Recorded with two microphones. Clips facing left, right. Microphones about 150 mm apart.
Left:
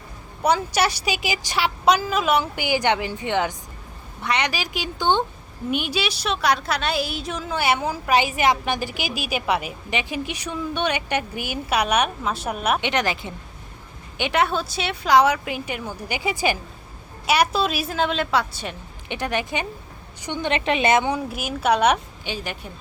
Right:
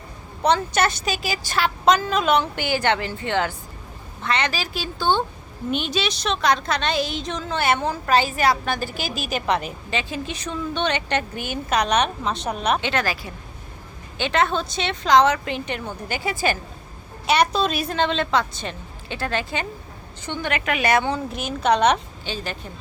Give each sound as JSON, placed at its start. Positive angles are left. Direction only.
{"t": 0.4, "sound": "a woman's voice", "side_deg": 10}
{"t": 12.8, "sound": "a woman's voice", "side_deg": 20}
{"t": 20.5, "sound": "a woman's voice", "side_deg": 25}
{"t": 21.2, "sound": "a woman's voice", "side_deg": 10}